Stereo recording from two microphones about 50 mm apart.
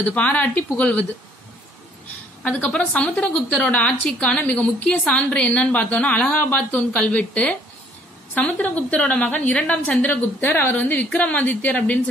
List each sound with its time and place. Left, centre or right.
0.0 s a woman's voice: left
2.7 s a woman's voice: left
10.0 s a woman's voice: left